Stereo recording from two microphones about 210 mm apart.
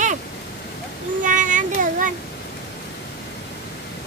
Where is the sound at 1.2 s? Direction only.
40° right (ahead or behind).